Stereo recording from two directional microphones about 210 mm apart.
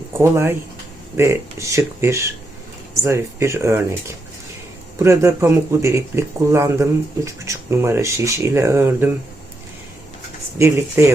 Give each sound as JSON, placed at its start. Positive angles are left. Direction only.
{"t": 0.2, "sound": "speech", "side_deg": -10}
{"t": 4.9, "sound": "speech", "side_deg": -15}
{"t": 10.6, "sound": "speech", "side_deg": -15}